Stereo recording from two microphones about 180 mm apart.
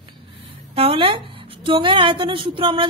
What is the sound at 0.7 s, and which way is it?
A woman's voice, 30° right (ahead or behind).